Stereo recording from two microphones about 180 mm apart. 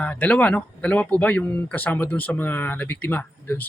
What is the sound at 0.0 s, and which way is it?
Speech, 10° left (ahead or behind).